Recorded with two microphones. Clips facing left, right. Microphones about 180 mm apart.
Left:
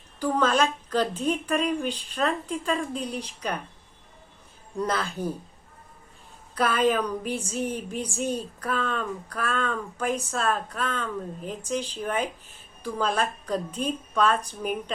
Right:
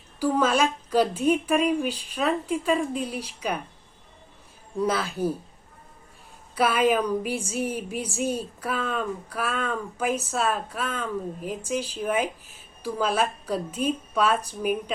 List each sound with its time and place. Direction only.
0.2 s a woman's voice: 10° right (ahead or behind)
4.8 s a woman's voice: 5° right (ahead or behind)
6.5 s a woman's voice: 10° right (ahead or behind)